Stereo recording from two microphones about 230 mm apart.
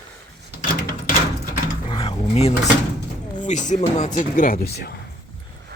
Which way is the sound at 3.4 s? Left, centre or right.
Left.